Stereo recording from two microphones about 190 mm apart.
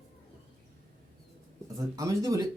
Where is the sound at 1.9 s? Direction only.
15° right (ahead or behind).